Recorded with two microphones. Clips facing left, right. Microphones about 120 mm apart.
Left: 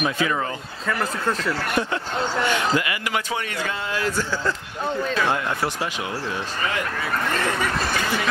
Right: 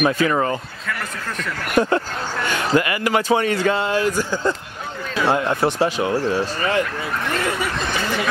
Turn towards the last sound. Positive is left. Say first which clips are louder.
# right 6 dB
turn(degrees=-35)  # may be behind; listen again after turning